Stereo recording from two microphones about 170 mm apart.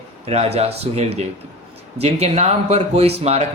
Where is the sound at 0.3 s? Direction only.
40° right (ahead or behind).